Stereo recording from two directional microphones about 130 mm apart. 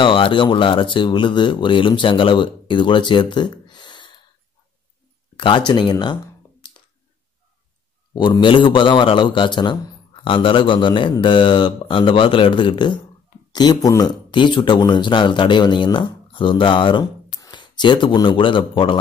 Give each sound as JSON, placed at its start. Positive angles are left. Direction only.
{"t": 0.0, "sound": "speech", "side_deg": 40}
{"t": 5.4, "sound": "speech", "side_deg": 40}
{"t": 8.1, "sound": "speech", "side_deg": 35}